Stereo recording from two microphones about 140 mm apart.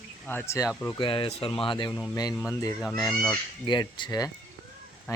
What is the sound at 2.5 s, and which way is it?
Speech, 20° left (ahead or behind).